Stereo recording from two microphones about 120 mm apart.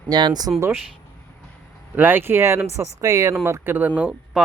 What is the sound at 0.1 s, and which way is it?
Speech, 35° right (ahead or behind).